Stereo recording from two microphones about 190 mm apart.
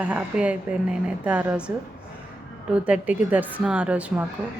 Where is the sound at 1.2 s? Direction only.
5° right (ahead or behind).